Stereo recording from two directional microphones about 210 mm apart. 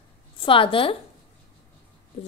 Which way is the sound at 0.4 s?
25° left (ahead or behind).